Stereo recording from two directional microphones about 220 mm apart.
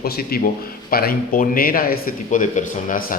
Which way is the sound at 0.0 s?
45° left (ahead or behind).